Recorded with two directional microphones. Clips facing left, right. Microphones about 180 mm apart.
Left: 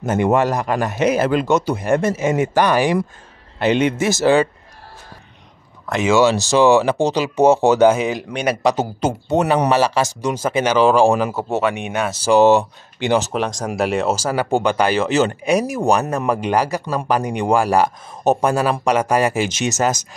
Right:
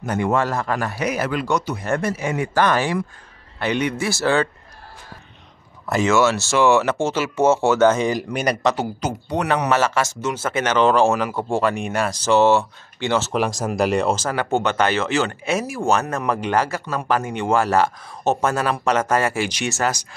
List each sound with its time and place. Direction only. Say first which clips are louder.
0.0 s a man's voice: left 4 dB; 20° left (ahead or behind)
6.0 s speech: left 4 dB; 15° left (ahead or behind); by 8.5 s 5° right (ahead or behind)
9.0 s a man's voice: left 7 dB; 25° left (ahead or behind); by 12.2 s centre (ahead or behind)
12.3 s speech: left 4 dB; 15° left (ahead or behind)
13.3 s speech: even; 5° right (ahead or behind); by 20.0 s 20° left (ahead or behind)